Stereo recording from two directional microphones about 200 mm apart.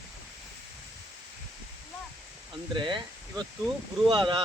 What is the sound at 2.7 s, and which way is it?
Speech, 25° right (ahead or behind).